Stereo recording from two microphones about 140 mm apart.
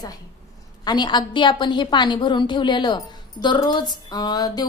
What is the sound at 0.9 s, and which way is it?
A woman's voice, 30° left (ahead or behind).